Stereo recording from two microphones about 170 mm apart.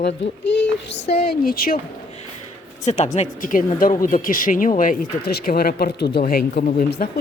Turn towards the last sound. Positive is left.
turn(degrees=60)  # may be behind; listen again after turning